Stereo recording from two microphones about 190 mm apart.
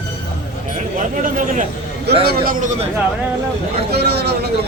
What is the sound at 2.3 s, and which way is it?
Speech, 50° right (ahead or behind).